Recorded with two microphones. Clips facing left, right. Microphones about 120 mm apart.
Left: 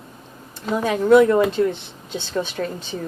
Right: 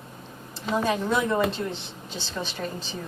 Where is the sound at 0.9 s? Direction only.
65° left (ahead or behind).